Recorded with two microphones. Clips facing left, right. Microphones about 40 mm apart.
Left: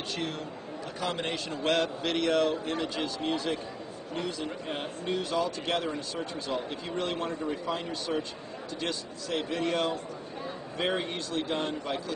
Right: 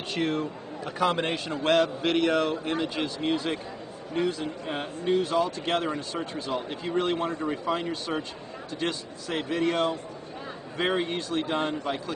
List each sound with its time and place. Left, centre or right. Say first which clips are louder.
0.1 s speech: right 10 dB; right
1.6 s a man's voice: right 5 dB; centre
4.6 s a man's voice: right 7 dB; centre
5.7 s speech: right 3 dB; right
6.1 s a man's voice: right 2 dB; centre
9.4 s a man's voice: right 4 dB; centre